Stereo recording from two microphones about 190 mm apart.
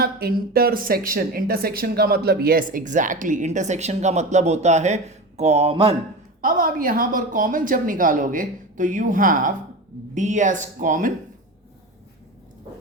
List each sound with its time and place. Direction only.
0.0 s speech: 55° right (ahead or behind); by 6.0 s 30° right (ahead or behind)
6.4 s speech: 45° right (ahead or behind)